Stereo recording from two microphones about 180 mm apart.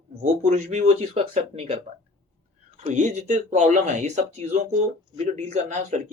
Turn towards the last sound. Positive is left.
turn(degrees=-40)  # may be behind; listen again after turning